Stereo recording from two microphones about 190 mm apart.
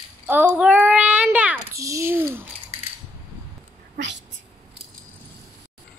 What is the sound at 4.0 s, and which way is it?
Cat, 70° right (ahead or behind).